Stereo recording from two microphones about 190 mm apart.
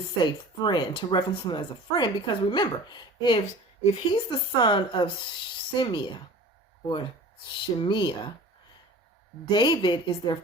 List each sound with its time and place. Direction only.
0.2 s speech: 25° left (ahead or behind)
9.5 s speech: 25° left (ahead or behind)